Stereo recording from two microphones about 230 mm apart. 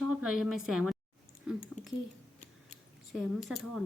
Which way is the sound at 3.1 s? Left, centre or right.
Centre.